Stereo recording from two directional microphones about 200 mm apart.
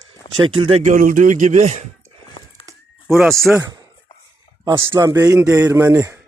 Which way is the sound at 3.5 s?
20° right (ahead or behind).